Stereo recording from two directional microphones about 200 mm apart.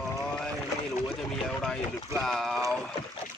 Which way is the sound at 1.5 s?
5° left (ahead or behind).